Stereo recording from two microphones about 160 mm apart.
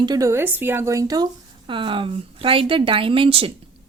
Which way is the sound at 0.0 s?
25° right (ahead or behind).